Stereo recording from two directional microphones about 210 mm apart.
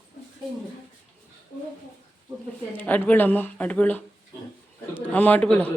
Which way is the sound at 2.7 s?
10° left (ahead or behind).